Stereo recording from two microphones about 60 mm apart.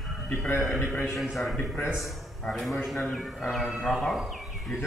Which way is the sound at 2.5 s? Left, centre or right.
Centre.